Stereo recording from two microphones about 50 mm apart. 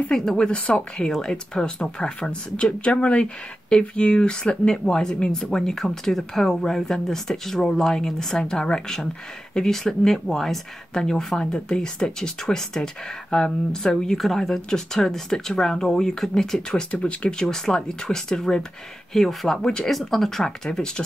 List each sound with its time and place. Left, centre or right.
0.1 s speech: centre
0.5 s speech: left
0.9 s speech: centre
14.1 s speech: centre